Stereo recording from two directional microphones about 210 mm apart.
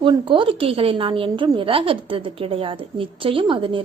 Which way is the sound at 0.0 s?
25° right (ahead or behind).